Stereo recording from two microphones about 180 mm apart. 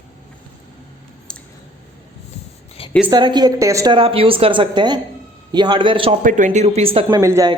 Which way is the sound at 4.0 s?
30° right (ahead or behind).